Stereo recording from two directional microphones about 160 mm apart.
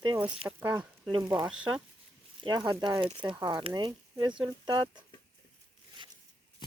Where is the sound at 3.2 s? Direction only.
30° right (ahead or behind).